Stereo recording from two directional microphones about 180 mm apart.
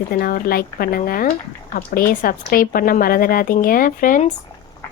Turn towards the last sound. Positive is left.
turn(degrees=45)  # may be behind; listen again after turning